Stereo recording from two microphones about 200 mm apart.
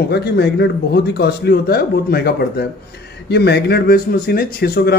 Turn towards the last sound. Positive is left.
turn(degrees=50)  # may be behind; listen again after turning